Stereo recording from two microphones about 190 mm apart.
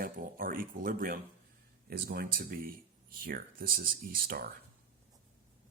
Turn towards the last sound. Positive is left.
turn(degrees=-50)  # may be behind; listen again after turning